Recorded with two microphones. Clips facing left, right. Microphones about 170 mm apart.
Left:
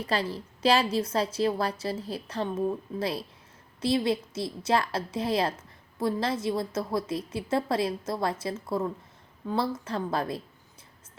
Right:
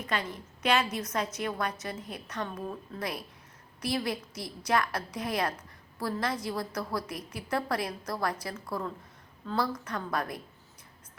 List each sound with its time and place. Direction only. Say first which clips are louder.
0.0 s a woman's voice: left 4 dB; 30° left (ahead or behind)